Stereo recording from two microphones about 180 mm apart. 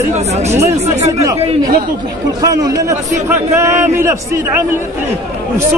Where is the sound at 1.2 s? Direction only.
20° right (ahead or behind).